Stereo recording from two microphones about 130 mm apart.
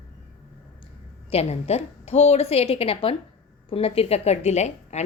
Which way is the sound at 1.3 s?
55° left (ahead or behind).